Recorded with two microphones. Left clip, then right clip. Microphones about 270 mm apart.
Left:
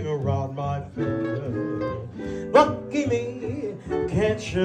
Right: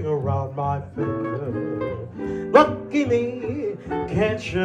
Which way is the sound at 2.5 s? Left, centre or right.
Right.